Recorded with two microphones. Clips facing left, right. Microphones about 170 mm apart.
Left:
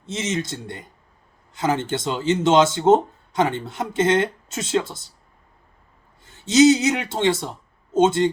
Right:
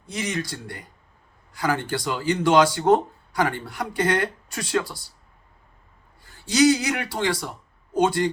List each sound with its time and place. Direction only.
0.0 s speech: 25° left (ahead or behind)
6.2 s speech: 25° left (ahead or behind)